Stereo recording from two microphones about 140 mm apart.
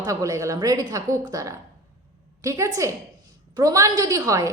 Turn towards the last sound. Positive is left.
turn(degrees=-25)  # may be behind; listen again after turning